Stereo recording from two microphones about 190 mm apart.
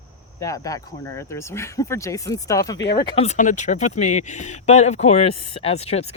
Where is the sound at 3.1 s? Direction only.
35° left (ahead or behind).